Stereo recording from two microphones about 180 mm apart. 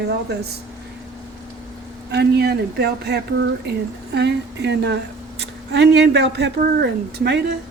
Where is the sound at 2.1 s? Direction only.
65° right (ahead or behind).